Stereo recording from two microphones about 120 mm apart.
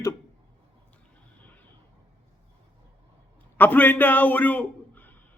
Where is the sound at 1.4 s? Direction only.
15° left (ahead or behind).